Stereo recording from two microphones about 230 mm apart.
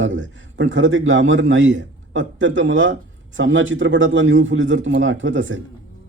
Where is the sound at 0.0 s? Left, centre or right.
Right.